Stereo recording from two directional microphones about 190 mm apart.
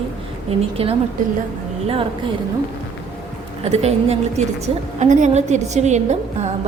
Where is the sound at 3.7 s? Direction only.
35° right (ahead or behind).